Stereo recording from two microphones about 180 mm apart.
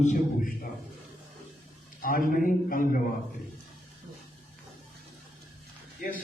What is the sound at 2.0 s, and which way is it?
A man's voice, 50° left (ahead or behind).